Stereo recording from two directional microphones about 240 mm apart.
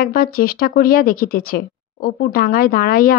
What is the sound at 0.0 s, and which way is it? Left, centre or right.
Speech, left.